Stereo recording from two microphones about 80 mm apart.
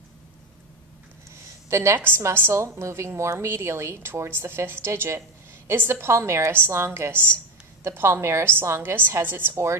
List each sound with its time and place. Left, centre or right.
1.7 s a woman's voice: right